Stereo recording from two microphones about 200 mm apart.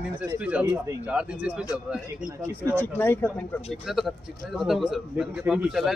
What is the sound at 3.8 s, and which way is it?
Speech, centre (ahead or behind).